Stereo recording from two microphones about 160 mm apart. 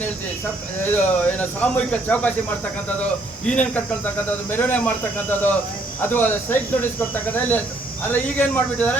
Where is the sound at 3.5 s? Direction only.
10° left (ahead or behind).